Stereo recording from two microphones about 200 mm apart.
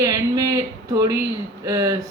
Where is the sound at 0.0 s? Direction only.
15° right (ahead or behind).